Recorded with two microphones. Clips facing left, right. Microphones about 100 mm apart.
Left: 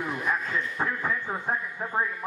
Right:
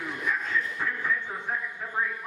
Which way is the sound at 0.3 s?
40° left (ahead or behind).